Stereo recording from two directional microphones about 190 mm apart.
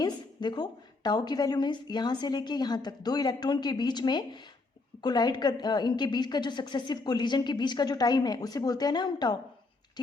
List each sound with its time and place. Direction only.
0.0 s a woman's voice: 20° left (ahead or behind)